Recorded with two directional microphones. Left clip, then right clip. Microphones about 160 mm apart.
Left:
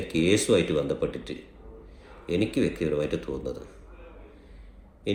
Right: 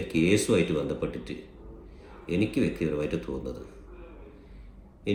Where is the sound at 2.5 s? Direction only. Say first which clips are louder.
Left 2 dB; 20° right (ahead or behind).